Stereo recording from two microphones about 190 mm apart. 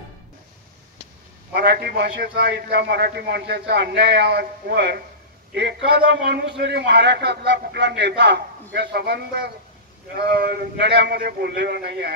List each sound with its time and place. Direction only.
1.5 s a man's voice: 60° right (ahead or behind)